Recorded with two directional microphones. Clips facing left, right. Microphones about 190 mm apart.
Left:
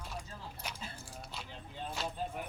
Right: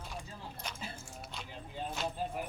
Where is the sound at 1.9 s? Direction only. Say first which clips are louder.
Right 1 dB; centre (ahead or behind).